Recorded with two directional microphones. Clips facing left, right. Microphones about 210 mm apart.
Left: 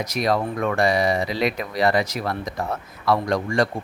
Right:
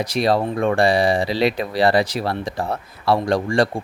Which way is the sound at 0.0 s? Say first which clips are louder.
Right 3 dB; 30° right (ahead or behind).